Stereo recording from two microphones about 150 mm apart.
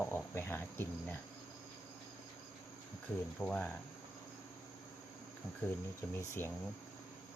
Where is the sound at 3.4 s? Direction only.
10° left (ahead or behind).